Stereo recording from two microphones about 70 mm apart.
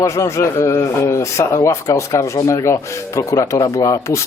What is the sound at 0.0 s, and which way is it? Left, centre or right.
A man's voice, left.